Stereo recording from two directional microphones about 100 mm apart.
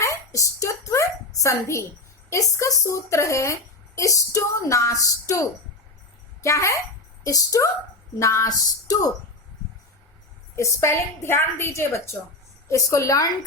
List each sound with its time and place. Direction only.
0.0 s a sound: 30° left (ahead or behind)
2.3 s a woman's voice: 35° left (ahead or behind)
10.5 s a woman's voice: 30° left (ahead or behind)